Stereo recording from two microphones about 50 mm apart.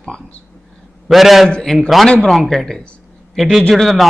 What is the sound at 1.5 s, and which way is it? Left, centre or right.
Speech, centre.